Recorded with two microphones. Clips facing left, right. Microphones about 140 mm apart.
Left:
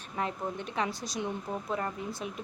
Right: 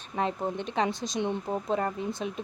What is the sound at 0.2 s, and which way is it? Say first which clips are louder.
Speech: right 4 dB; 25° right (ahead or behind).